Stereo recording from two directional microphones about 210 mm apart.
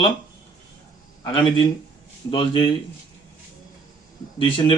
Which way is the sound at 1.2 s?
25° left (ahead or behind).